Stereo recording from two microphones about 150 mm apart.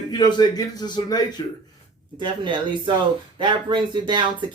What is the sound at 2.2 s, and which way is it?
Speech, 30° right (ahead or behind).